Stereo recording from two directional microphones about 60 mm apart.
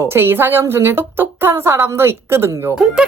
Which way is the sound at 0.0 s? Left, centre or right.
Right.